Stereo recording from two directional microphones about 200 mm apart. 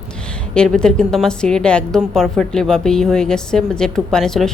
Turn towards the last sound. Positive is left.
turn(degrees=0)  # may be behind; listen again after turning